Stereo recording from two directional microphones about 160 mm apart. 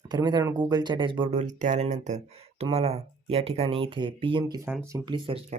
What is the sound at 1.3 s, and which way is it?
Speech, 50° right (ahead or behind).